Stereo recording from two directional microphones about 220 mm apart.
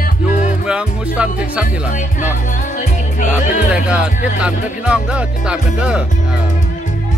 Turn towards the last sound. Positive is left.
turn(degrees=-5)  # may be behind; listen again after turning